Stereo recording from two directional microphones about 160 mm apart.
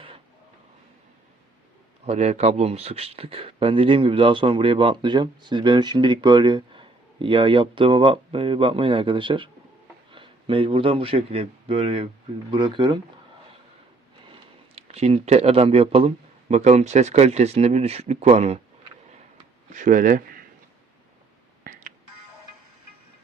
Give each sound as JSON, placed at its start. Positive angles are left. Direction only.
{"t": 2.0, "sound": "speech", "side_deg": -45}
{"t": 14.8, "sound": "speech", "side_deg": -40}
{"t": 19.7, "sound": "speech", "side_deg": -55}
{"t": 21.6, "sound": "a sound", "side_deg": -55}